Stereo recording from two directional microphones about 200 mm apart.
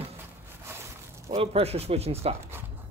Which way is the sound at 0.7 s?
10° right (ahead or behind).